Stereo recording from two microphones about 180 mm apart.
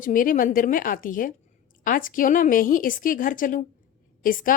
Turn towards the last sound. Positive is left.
turn(degrees=50)  # may be behind; listen again after turning